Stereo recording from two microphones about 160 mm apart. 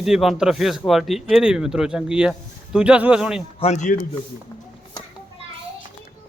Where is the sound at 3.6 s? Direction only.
45° left (ahead or behind).